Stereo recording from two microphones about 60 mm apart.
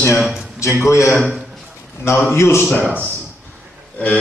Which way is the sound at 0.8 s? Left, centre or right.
Left.